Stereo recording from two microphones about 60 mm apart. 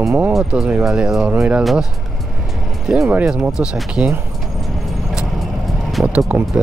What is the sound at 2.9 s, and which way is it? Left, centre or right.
Speech, centre.